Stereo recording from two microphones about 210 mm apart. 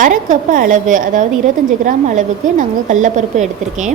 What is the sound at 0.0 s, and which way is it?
A woman's voice, 40° right (ahead or behind).